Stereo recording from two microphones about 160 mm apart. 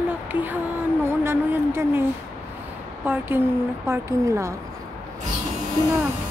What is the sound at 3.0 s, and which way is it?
A woman's voice, 10° right (ahead or behind).